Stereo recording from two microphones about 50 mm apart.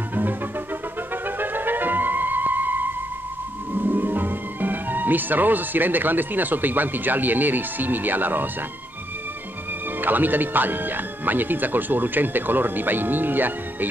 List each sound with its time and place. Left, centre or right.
0.1 s music: right
3.7 s speech: right
9.9 s speech: right